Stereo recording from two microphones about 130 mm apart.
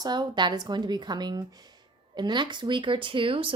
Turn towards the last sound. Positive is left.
turn(degrees=-40)  # may be behind; listen again after turning